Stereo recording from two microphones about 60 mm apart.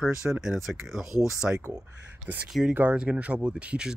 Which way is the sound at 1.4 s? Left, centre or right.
Right.